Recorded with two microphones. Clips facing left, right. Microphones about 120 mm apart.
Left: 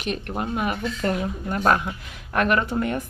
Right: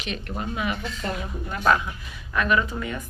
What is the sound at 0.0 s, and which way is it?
Speech, 50° left (ahead or behind).